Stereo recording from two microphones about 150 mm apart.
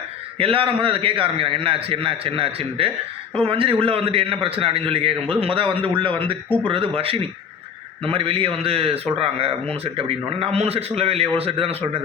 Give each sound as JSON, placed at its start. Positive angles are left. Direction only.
{"t": 0.3, "sound": "a man's voice", "side_deg": -40}